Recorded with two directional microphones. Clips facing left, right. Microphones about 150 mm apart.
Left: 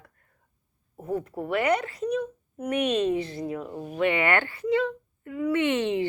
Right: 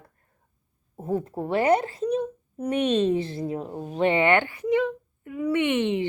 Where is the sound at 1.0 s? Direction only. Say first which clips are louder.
Right 2 dB; 25° right (ahead or behind).